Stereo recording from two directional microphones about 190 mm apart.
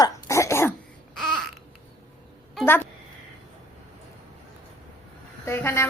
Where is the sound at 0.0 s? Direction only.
15° left (ahead or behind).